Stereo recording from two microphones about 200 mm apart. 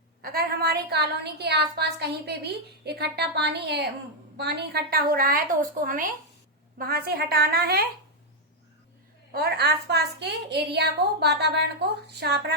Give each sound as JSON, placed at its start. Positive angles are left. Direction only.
{"t": 0.2, "sound": "a woman's voice", "side_deg": -50}
{"t": 9.3, "sound": "a woman's voice", "side_deg": -50}